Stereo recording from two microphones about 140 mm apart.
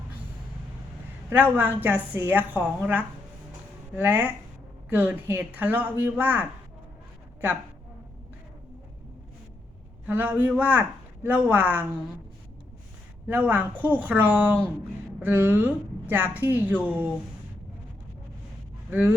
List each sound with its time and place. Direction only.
1.3 s a woman's voice: 15° right (ahead or behind)
10.1 s a woman's voice: 15° right (ahead or behind)
13.2 s a woman's voice: 15° right (ahead or behind)
18.9 s speech: 15° right (ahead or behind)